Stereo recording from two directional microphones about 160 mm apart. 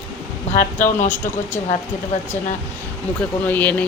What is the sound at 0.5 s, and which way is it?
Speech, 55° left (ahead or behind).